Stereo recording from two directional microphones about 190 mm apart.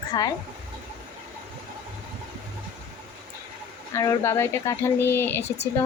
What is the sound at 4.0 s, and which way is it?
Speech, 15° left (ahead or behind).